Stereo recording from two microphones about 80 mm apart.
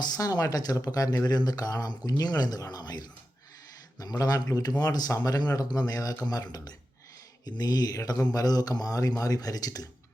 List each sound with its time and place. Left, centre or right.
0.0 s speech: left